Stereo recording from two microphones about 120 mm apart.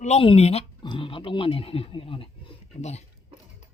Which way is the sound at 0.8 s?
45° left (ahead or behind).